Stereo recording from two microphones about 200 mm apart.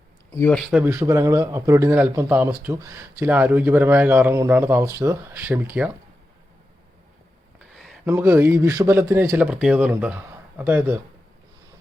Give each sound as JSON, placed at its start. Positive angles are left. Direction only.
{"t": 0.3, "sound": "speech", "side_deg": 10}
{"t": 0.7, "sound": "a man's voice", "side_deg": -10}
{"t": 7.8, "sound": "a sound", "side_deg": 0}
{"t": 8.1, "sound": "a man's voice", "side_deg": -10}